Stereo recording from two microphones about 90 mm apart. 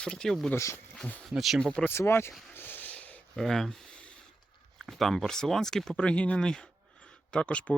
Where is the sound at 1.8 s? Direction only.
25° left (ahead or behind).